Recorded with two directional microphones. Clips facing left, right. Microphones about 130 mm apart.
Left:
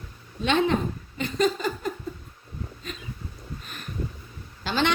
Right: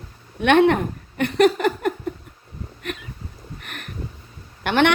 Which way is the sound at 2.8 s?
70° right (ahead or behind).